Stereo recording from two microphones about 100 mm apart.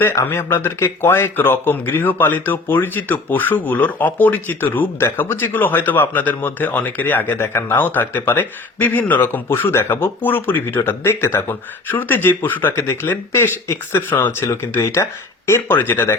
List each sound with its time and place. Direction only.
0.0 s speech: 20° left (ahead or behind)